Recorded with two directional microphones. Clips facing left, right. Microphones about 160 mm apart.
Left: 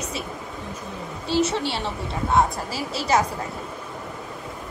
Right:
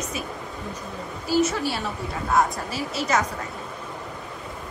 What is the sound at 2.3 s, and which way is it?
Speech, 35° left (ahead or behind).